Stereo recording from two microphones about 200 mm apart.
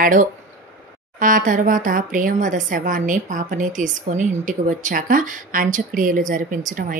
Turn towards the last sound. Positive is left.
turn(degrees=-40)  # may be behind; listen again after turning